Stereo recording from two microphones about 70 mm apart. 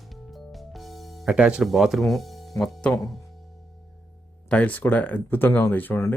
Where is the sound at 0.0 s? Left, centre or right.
Centre.